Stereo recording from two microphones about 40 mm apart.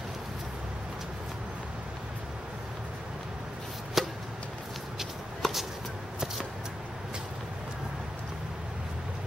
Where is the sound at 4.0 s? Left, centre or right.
Centre.